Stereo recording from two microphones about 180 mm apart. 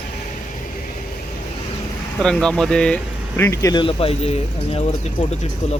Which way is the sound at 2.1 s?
5° left (ahead or behind).